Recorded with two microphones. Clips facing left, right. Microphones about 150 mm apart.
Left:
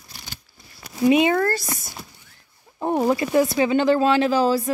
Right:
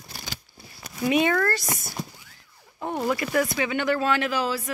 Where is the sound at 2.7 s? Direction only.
35° left (ahead or behind).